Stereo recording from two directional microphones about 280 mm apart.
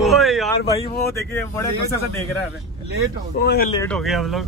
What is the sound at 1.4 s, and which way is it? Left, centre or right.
Speech, centre.